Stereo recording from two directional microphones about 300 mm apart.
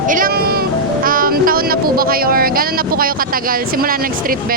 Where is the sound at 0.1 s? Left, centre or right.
Right.